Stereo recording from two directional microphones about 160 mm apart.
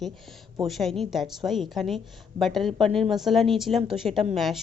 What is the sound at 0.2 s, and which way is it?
A woman's voice, centre (ahead or behind).